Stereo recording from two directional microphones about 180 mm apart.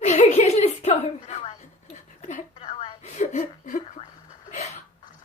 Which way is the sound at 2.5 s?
30° left (ahead or behind).